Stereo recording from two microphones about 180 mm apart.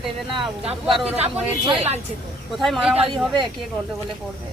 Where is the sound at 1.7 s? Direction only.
35° right (ahead or behind).